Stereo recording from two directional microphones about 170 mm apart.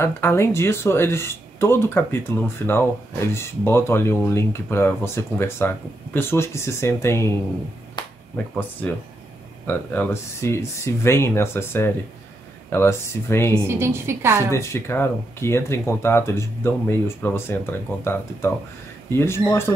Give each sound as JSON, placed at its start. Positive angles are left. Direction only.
{"t": 0.0, "sound": "speech", "side_deg": 15}
{"t": 8.0, "sound": "finger snapping", "side_deg": 25}
{"t": 9.7, "sound": "speech", "side_deg": 15}
{"t": 13.7, "sound": "a woman's voice", "side_deg": -15}
{"t": 14.5, "sound": "speech", "side_deg": 15}